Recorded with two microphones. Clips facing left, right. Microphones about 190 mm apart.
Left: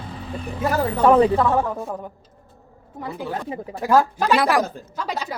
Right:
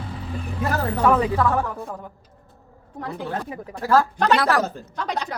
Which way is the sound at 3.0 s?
5° left (ahead or behind).